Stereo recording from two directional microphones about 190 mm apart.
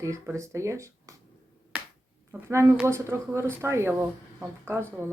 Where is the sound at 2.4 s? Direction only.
15° right (ahead or behind).